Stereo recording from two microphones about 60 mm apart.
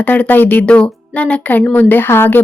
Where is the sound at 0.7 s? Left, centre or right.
Centre; by 2.4 s left.